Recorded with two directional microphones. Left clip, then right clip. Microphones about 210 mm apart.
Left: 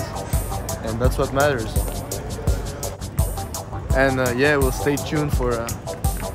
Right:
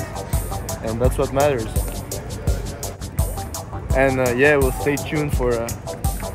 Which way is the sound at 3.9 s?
Centre (ahead or behind).